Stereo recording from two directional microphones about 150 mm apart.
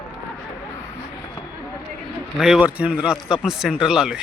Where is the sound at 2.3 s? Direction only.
5° right (ahead or behind).